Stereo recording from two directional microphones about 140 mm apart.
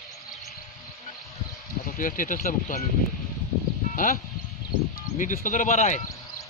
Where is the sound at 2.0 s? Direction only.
75° left (ahead or behind).